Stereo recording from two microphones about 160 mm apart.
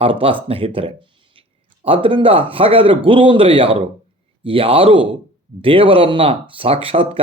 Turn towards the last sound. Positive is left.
turn(degrees=-35)  # may be behind; listen again after turning